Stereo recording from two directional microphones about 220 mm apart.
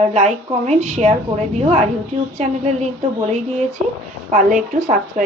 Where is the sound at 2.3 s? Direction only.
30° right (ahead or behind).